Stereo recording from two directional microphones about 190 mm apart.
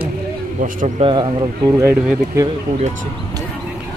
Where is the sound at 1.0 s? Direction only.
25° right (ahead or behind).